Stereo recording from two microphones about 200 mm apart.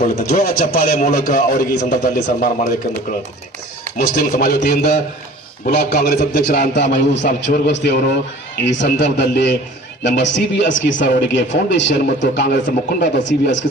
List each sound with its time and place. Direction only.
0.0 s a man's voice: 45° left (ahead or behind)
4.1 s a man's voice: 45° left (ahead or behind)
7.1 s speech: 60° left (ahead or behind)